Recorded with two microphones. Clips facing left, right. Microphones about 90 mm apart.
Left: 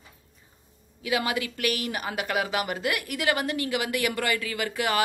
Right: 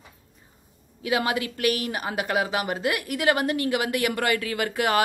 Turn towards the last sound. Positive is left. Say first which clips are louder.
# right 3 dB
turn(degrees=-45)  # may be behind; listen again after turning